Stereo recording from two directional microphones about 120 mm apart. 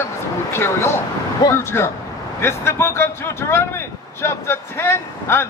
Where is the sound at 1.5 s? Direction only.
20° left (ahead or behind).